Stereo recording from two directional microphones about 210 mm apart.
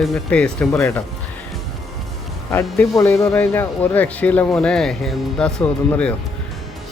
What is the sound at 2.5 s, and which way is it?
Speech, 15° left (ahead or behind).